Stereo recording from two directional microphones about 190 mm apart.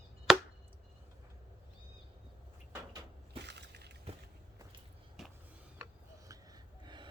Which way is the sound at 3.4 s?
65° right (ahead or behind).